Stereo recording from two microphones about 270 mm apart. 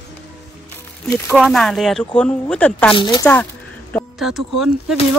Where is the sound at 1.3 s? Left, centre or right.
Centre.